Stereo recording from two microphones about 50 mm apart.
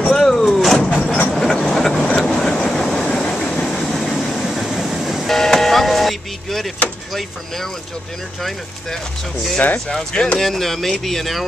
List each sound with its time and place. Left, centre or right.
0.1 s vehicle: centre
0.7 s vehicle: centre
1.3 s train: centre
2.0 s vehicle: centre
5.3 s vehicle: centre
9.8 s speech: centre
10.4 s speech: centre